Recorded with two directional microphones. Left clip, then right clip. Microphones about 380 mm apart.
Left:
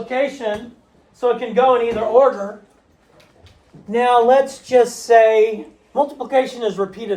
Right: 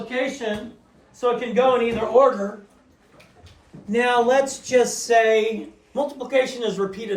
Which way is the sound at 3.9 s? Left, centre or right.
Left.